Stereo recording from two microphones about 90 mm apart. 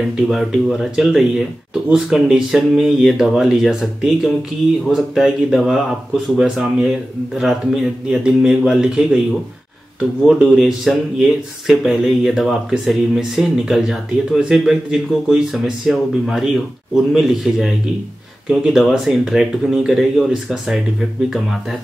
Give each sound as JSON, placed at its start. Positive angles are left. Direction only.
{"t": 0.0, "sound": "speech", "side_deg": 0}
{"t": 10.4, "sound": "speech", "side_deg": -5}